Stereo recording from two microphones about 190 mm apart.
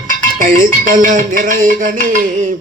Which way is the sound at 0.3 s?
45° right (ahead or behind).